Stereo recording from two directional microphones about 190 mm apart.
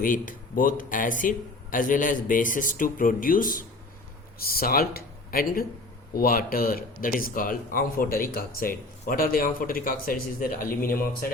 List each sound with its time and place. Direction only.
0.0 s speech: 45° left (ahead or behind)